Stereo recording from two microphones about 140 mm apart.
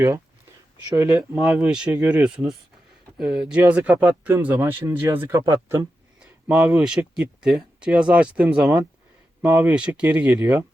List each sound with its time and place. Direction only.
0.9 s speech: 25° right (ahead or behind)
1.4 s speech: 5° right (ahead or behind)
6.5 s speech: 5° right (ahead or behind)